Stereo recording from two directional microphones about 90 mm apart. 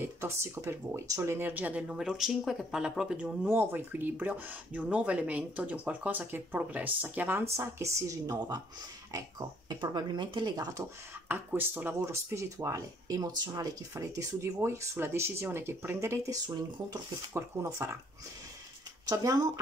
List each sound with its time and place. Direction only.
0.0 s speech: 30° right (ahead or behind); by 3.3 s 10° right (ahead or behind)
3.4 s speech: 20° right (ahead or behind)
7.5 s speech: 35° right (ahead or behind)
9.7 s speech: 55° right (ahead or behind)
11.2 s speech: 20° right (ahead or behind)
12.0 s speech: 30° right (ahead or behind)
16.4 s speech: 50° right (ahead or behind)
17.3 s speech: 30° right (ahead or behind)
19.0 s speech: 45° right (ahead or behind)